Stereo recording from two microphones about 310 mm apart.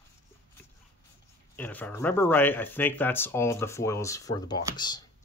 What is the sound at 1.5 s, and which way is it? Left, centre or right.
Speech, centre.